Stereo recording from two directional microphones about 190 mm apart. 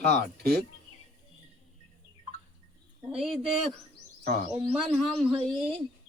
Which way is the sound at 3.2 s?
Centre (ahead or behind).